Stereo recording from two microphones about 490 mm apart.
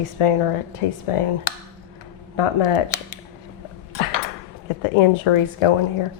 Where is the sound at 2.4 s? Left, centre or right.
Left.